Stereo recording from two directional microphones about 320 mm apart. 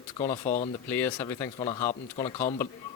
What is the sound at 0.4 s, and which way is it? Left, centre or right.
Speech, left.